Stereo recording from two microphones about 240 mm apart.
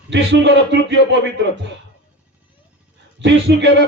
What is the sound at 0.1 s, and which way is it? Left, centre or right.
Speech, right.